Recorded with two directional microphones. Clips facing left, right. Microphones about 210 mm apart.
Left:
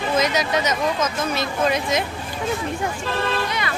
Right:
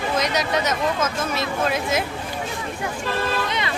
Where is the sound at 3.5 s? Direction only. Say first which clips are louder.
Even; 25° right (ahead or behind).